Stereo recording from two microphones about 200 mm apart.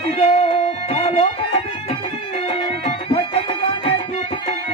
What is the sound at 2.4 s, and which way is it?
Music, 30° left (ahead or behind).